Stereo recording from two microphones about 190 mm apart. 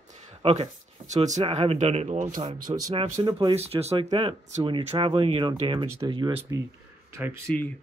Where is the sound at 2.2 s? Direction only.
20° right (ahead or behind).